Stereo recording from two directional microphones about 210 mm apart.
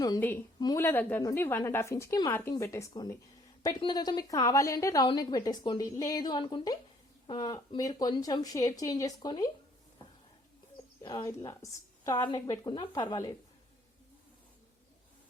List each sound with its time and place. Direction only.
0.0 s a woman's voice: 15° left (ahead or behind)
11.0 s a woman's voice: 15° left (ahead or behind)